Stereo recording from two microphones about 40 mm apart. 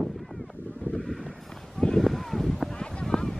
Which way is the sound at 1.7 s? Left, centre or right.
Centre.